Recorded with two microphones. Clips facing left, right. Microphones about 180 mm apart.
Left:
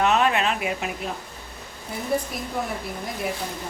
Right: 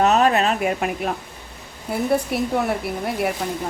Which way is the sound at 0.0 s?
40° right (ahead or behind).